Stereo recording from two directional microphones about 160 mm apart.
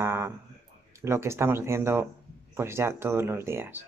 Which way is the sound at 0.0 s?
15° right (ahead or behind).